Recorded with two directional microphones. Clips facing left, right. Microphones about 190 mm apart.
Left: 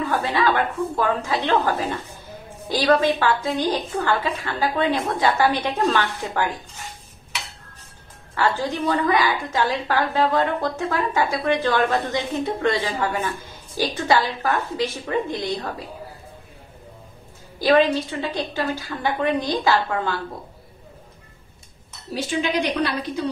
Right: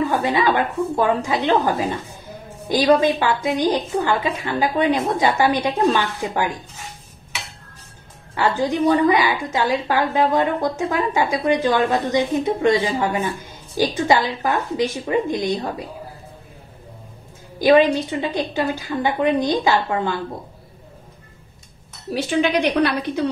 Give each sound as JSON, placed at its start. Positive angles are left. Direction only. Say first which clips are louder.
{"t": 0.0, "sound": "a woman's voice", "louder": "right 3 dB", "side_deg": -20}
{"t": 8.4, "sound": "a woman's voice", "louder": "right 3 dB", "side_deg": -20}
{"t": 17.6, "sound": "a woman's voice", "louder": "right 3 dB", "side_deg": -15}
{"t": 22.1, "sound": "a woman's voice", "louder": "right 4 dB", "side_deg": -60}